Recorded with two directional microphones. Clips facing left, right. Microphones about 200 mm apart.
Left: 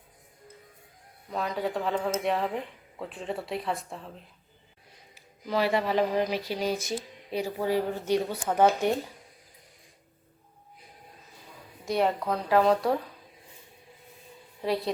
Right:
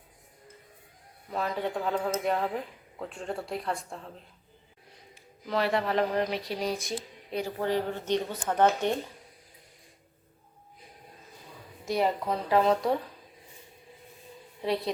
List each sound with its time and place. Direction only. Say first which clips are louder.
1.3 s speech: left 1 dB; centre (ahead or behind)
5.1 s speech: left 1 dB; centre (ahead or behind)
11.9 s speech: left 1 dB; centre (ahead or behind)
14.6 s a woman's voice: left 1 dB; centre (ahead or behind)